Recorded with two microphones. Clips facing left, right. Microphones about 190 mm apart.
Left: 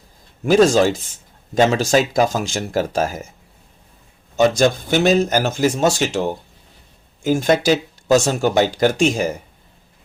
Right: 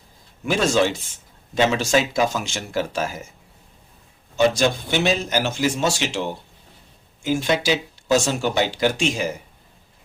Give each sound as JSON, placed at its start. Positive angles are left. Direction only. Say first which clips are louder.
{"t": 0.4, "sound": "speech", "louder": "left 6 dB", "side_deg": 40}
{"t": 4.4, "sound": "speech", "louder": "left 3 dB", "side_deg": 45}